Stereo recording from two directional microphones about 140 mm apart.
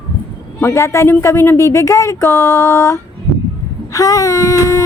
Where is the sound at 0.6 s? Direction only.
20° left (ahead or behind).